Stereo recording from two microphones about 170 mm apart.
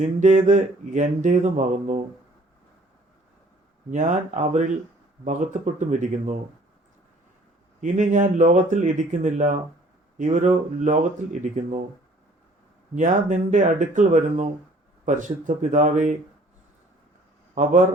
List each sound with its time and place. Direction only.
0.2 s speech: 45° right (ahead or behind)
3.9 s speech: 45° right (ahead or behind)
7.8 s speech: 45° right (ahead or behind)
12.9 s speech: 45° right (ahead or behind)
17.5 s a man's voice: 45° right (ahead or behind)